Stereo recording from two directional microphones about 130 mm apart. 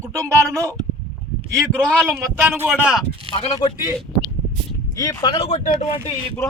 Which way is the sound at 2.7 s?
5° right (ahead or behind).